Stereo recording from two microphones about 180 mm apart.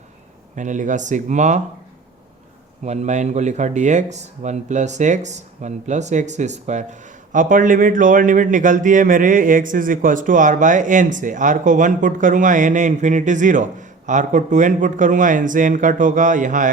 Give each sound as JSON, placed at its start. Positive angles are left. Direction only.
{"t": 0.5, "sound": "a man's voice", "side_deg": -45}
{"t": 2.8, "sound": "a man's voice", "side_deg": -40}